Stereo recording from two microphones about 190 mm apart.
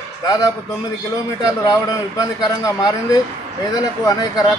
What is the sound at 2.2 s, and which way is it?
A man's voice, 20° left (ahead or behind).